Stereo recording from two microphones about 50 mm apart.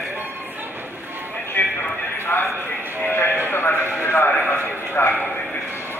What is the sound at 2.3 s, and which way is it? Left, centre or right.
Speech, left.